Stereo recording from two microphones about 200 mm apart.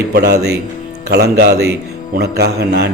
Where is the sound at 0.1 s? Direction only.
55° right (ahead or behind).